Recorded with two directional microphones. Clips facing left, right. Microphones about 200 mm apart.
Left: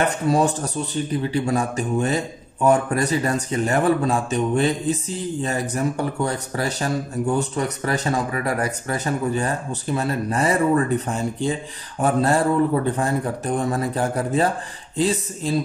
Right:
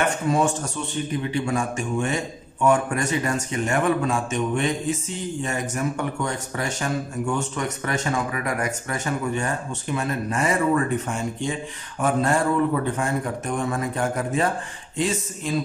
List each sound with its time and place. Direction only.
0.0 s speech: 35° left (ahead or behind)